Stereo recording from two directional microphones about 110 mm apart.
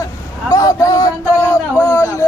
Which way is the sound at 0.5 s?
30° left (ahead or behind).